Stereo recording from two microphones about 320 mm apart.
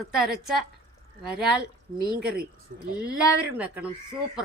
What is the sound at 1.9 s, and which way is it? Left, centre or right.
Speech, right.